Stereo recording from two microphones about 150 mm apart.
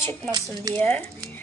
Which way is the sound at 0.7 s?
10° left (ahead or behind).